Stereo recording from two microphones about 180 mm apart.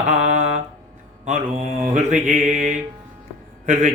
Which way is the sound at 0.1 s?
40° right (ahead or behind).